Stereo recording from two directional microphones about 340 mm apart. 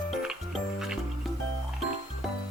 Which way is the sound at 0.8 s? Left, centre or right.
Centre.